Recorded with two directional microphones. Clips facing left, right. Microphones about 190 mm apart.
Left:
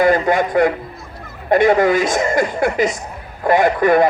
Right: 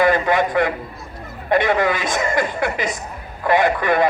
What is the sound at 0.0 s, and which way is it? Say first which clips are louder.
A man's voice: left 2 dB; 45° left (ahead or behind).